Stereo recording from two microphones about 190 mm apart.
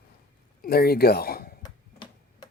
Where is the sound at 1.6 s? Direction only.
20° left (ahead or behind).